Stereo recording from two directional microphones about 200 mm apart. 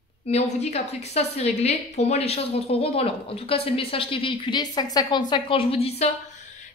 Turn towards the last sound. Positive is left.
turn(degrees=30)  # may be behind; listen again after turning